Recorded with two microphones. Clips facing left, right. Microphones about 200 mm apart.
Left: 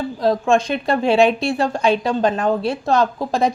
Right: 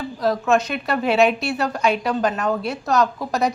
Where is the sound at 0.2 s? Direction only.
30° left (ahead or behind).